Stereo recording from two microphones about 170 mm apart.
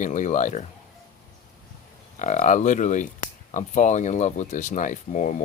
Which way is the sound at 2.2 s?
50° left (ahead or behind).